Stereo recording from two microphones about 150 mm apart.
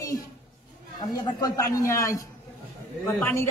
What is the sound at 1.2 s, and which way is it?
A woman's voice, 25° left (ahead or behind).